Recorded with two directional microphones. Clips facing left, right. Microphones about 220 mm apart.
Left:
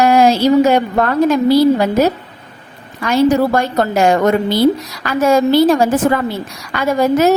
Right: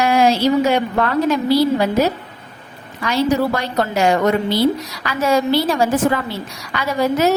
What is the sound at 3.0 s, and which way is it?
A woman's voice, 50° left (ahead or behind).